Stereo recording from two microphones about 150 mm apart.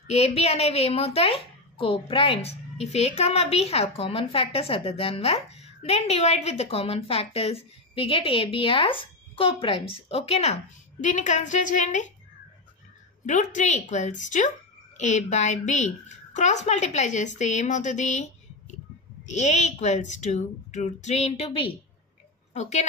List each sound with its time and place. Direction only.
0.0 s a woman's voice: 45° left (ahead or behind)
13.2 s a woman's voice: 55° left (ahead or behind)